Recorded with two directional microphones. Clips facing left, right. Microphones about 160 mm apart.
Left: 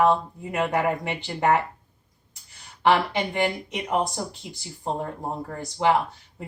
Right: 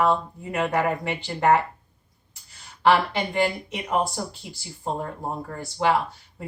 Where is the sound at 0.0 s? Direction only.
15° left (ahead or behind).